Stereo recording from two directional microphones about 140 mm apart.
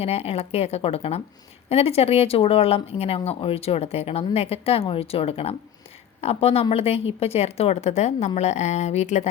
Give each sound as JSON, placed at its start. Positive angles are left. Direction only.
{"t": 0.0, "sound": "speech", "side_deg": 45}